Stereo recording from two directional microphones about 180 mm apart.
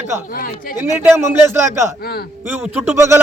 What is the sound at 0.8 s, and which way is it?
Speech, 10° right (ahead or behind).